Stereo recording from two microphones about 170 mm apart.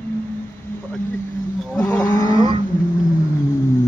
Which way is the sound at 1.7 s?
10° left (ahead or behind).